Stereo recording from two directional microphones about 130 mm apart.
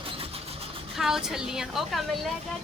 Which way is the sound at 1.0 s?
5° right (ahead or behind).